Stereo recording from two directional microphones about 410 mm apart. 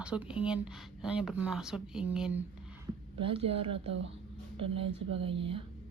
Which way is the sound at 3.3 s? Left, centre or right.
Centre.